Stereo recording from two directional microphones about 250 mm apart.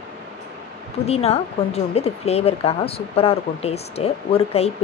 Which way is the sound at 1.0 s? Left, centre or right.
Left.